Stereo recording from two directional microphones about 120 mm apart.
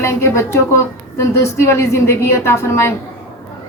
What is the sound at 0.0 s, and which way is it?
A woman's voice, 20° left (ahead or behind).